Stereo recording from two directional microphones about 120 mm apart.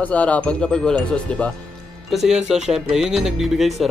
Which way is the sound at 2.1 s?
5° right (ahead or behind).